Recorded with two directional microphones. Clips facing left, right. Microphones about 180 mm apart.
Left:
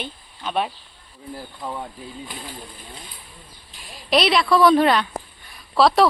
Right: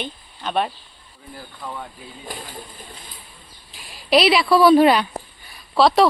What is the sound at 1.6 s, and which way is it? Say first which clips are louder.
Speech: left 2 dB; 20° left (ahead or behind).